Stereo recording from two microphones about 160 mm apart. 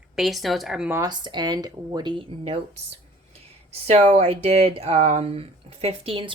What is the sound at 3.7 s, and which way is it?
Speech, 40° right (ahead or behind).